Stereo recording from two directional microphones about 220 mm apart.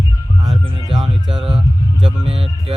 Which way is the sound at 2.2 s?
25° right (ahead or behind).